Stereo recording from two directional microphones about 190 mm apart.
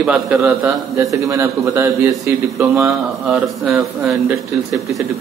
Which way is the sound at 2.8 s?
5° right (ahead or behind).